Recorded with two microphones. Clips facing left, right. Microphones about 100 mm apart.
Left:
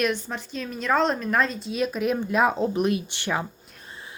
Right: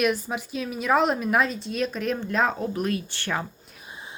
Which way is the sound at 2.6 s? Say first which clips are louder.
Left 4 dB; 20° left (ahead or behind).